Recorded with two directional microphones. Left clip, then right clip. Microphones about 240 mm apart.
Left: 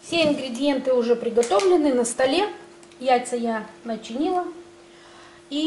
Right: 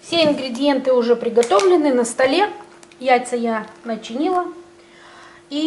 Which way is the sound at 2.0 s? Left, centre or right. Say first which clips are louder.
Right 5 dB; centre.